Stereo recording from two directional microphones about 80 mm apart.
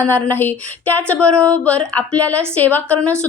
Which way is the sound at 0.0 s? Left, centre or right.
Left.